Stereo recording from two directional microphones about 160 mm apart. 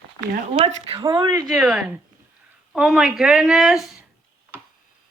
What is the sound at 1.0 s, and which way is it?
Speech, 25° right (ahead or behind).